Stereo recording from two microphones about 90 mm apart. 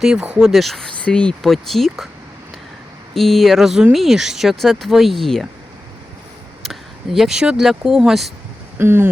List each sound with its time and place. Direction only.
0.0 s speech: 10° right (ahead or behind)
3.2 s speech: centre (ahead or behind)
6.6 s speech: centre (ahead or behind)
8.8 s speech: 25° right (ahead or behind)